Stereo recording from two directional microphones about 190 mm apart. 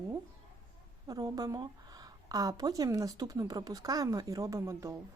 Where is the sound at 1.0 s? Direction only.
20° right (ahead or behind).